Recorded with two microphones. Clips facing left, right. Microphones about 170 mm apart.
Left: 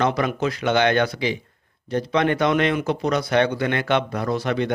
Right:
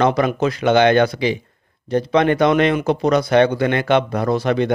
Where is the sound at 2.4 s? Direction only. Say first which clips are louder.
Right 4 dB; 25° right (ahead or behind).